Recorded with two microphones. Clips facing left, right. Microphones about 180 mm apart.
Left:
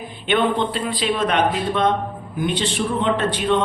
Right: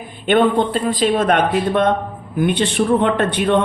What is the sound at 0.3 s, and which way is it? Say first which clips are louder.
Speech: right 5 dB; 50° right (ahead or behind).